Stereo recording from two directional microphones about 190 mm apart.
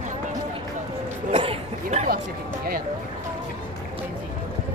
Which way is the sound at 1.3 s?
30° right (ahead or behind).